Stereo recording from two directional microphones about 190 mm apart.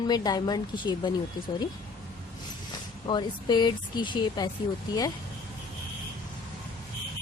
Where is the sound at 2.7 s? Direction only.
25° left (ahead or behind).